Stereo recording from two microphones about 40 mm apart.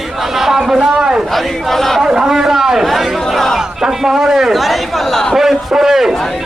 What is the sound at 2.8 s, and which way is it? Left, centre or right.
Chatter, centre.